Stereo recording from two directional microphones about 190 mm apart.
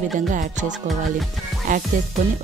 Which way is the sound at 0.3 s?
40° right (ahead or behind).